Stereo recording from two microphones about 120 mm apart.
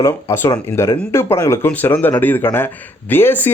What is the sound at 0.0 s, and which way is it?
Speech, 25° left (ahead or behind).